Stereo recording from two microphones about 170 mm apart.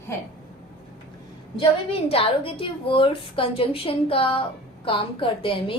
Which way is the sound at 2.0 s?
35° left (ahead or behind).